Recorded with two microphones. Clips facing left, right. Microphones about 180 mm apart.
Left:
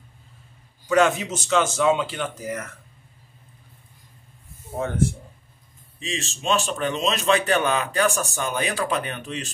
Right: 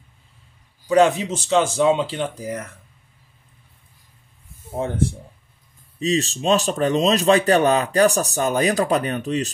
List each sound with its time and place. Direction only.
0.8 s a man's voice: 30° right (ahead or behind)
4.7 s a man's voice: 30° right (ahead or behind)